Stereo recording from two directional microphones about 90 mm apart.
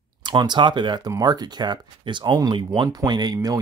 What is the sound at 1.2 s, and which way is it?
Speech, 50° right (ahead or behind).